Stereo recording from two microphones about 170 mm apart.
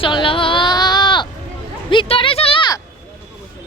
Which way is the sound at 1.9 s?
30° left (ahead or behind).